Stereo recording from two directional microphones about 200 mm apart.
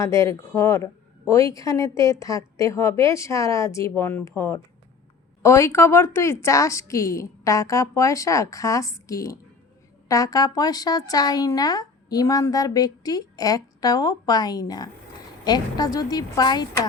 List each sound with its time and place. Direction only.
0.0 s a woman's voice: 15° left (ahead or behind)